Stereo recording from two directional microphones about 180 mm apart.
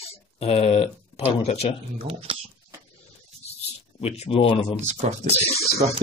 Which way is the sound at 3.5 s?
35° left (ahead or behind).